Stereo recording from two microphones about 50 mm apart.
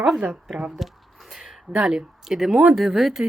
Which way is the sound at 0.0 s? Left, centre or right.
Centre.